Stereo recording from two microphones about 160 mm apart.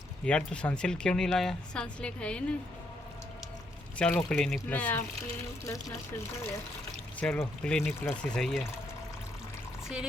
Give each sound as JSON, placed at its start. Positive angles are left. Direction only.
{"t": 0.3, "sound": "speech", "side_deg": 5}
{"t": 3.9, "sound": "speech", "side_deg": 10}
{"t": 5.6, "sound": "speech", "side_deg": 20}
{"t": 7.2, "sound": "speech", "side_deg": 5}